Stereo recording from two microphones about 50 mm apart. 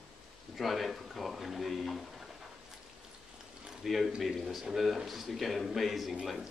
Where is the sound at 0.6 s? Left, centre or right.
Centre.